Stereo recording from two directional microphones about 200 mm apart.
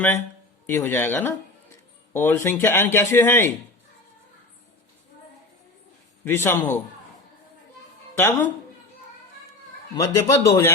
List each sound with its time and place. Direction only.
0.7 s speech: 10° left (ahead or behind)
6.2 s speech: 10° left (ahead or behind)
8.2 s speech: 10° left (ahead or behind)
9.9 s speech: 15° left (ahead or behind)